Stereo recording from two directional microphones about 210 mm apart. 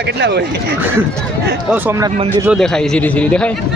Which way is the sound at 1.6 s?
10° right (ahead or behind).